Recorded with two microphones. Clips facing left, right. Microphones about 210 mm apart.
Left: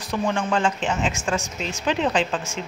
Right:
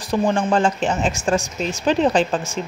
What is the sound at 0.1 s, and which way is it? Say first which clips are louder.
A woman's voice: right 5 dB; 30° right (ahead or behind).